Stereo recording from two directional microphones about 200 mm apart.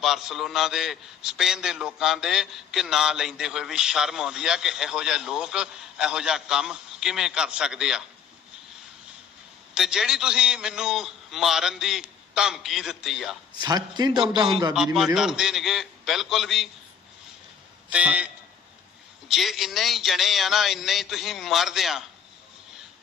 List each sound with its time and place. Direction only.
0.0 s a man's voice: centre (ahead or behind)
9.7 s a man's voice: centre (ahead or behind)
13.6 s a man's voice: 20° right (ahead or behind)
14.9 s a man's voice: centre (ahead or behind)
17.8 s speech: 5° right (ahead or behind)
19.3 s a man's voice: centre (ahead or behind)